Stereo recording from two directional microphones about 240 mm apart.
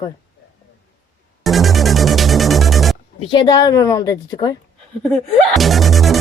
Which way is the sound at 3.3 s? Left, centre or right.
Centre.